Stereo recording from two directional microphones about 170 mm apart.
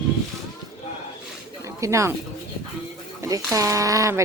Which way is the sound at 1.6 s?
15° right (ahead or behind).